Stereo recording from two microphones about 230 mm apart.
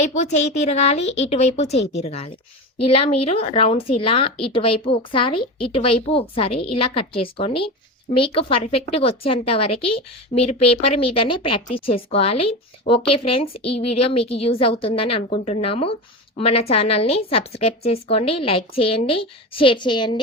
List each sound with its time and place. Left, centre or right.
0.0 s a woman's voice: left